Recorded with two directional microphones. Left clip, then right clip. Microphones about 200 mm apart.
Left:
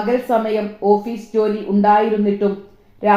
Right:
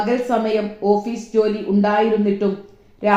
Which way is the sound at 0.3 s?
20° right (ahead or behind).